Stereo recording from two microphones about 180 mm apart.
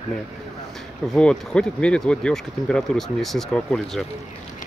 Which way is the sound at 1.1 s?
5° left (ahead or behind).